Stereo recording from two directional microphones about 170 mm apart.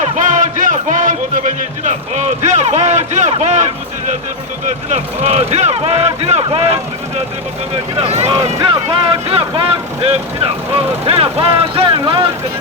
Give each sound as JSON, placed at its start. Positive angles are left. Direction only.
{"t": 0.0, "sound": "speech", "side_deg": -45}
{"t": 7.9, "sound": "speech", "side_deg": -40}
{"t": 8.7, "sound": "speech", "side_deg": -30}